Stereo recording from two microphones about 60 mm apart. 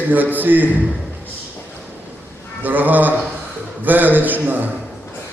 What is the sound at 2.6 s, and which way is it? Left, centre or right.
Speech, right.